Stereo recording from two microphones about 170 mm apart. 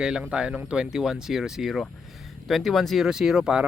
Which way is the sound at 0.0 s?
5° right (ahead or behind).